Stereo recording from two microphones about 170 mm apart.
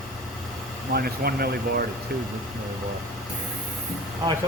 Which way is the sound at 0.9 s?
65° right (ahead or behind).